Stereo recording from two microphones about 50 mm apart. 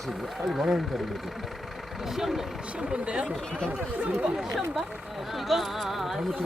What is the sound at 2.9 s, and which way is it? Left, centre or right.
Speech, right.